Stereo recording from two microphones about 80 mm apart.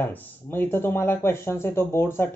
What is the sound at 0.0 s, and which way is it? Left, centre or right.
Speech, left.